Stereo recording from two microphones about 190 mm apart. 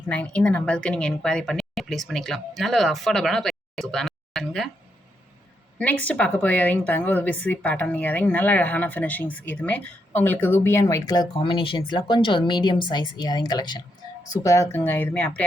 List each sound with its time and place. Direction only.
0.1 s speech: 5° left (ahead or behind)
5.8 s a woman's voice: 10° left (ahead or behind)